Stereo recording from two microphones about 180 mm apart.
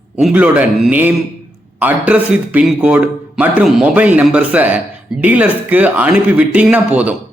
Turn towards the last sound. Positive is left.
turn(degrees=-10)  # may be behind; listen again after turning